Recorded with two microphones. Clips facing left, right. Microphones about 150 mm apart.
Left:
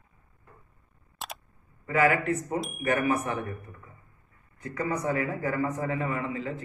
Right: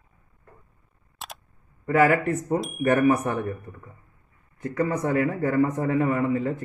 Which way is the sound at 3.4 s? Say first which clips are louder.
Right 5 dB; 40° right (ahead or behind).